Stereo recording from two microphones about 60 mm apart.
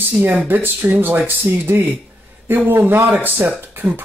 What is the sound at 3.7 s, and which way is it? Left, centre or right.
Cough, right.